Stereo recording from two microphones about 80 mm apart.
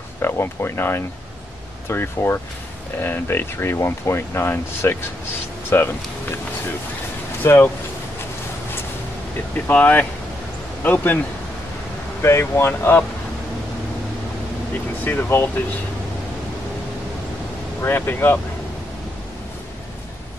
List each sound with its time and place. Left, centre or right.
0.2 s speech: left
7.4 s speech: left
9.7 s a man's voice: left
12.2 s speech: left
15.0 s speech: left
17.8 s speech: left